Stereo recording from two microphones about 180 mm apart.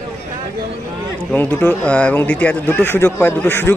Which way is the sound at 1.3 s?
10° left (ahead or behind).